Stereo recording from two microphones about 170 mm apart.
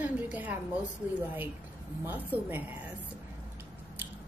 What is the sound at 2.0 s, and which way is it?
Speech, 10° right (ahead or behind).